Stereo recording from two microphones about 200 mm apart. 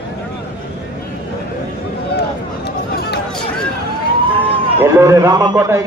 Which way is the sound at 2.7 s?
55° left (ahead or behind).